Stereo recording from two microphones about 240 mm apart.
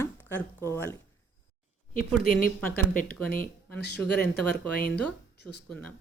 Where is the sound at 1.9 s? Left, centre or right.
Left.